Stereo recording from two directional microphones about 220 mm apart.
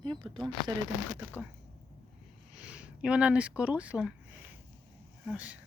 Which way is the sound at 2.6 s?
5° right (ahead or behind).